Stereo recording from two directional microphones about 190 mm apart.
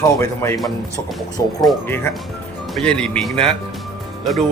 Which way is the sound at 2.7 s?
5° left (ahead or behind).